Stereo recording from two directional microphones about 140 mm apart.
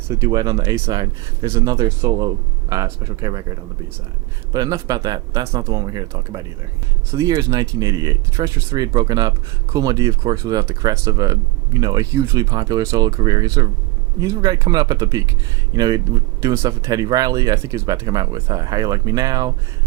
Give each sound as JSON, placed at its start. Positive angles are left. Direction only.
{"t": 0.1, "sound": "speech", "side_deg": -25}
{"t": 4.5, "sound": "speech", "side_deg": -25}